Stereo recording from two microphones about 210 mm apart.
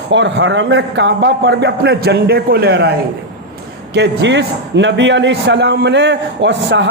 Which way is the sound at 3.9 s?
55° right (ahead or behind).